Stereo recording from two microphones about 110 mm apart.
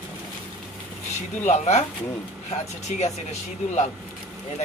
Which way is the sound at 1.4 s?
90° left.